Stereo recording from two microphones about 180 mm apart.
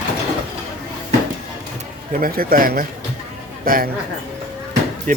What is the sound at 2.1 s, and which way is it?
A man's voice, 55° right (ahead or behind).